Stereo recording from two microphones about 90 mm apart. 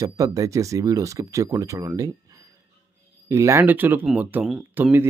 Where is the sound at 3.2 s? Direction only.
35° right (ahead or behind).